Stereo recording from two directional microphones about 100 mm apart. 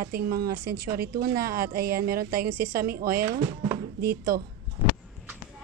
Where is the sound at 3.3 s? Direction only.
30° right (ahead or behind).